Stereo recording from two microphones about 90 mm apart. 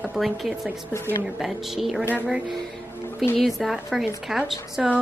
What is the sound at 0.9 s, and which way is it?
Speech, 30° left (ahead or behind).